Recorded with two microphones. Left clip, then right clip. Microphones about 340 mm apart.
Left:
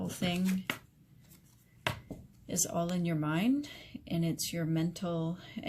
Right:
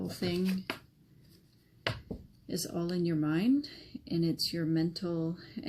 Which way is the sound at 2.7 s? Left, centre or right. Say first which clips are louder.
Right 5 dB; left.